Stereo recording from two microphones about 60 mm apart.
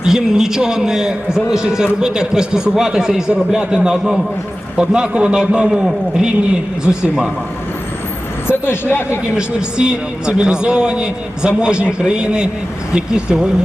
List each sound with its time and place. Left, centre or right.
0.0 s a man's voice: centre
8.4 s speech: left
9.3 s a man's voice: centre